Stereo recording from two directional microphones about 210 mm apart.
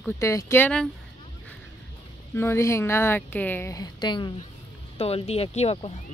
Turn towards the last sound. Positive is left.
turn(degrees=30)  # may be behind; listen again after turning